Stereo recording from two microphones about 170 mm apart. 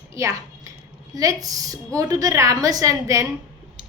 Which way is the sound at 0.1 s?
20° right (ahead or behind).